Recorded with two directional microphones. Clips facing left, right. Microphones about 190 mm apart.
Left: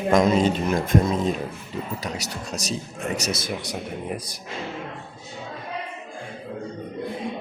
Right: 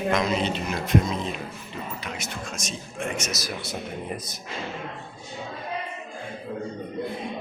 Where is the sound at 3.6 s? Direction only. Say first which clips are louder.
Left 2 dB; 10° left (ahead or behind).